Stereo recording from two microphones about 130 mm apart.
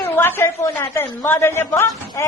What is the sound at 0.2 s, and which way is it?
A woman's voice, 15° left (ahead or behind).